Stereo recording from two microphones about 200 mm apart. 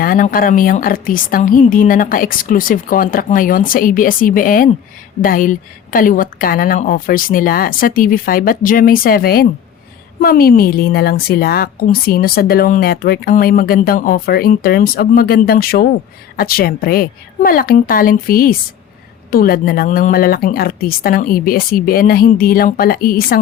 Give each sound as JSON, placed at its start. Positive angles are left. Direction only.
{"t": 0.0, "sound": "a woman's voice", "side_deg": 45}